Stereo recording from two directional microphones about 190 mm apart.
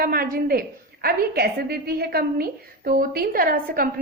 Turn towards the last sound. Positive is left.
turn(degrees=-50)  # may be behind; listen again after turning